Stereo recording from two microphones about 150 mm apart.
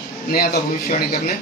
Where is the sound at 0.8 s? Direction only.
75° left (ahead or behind).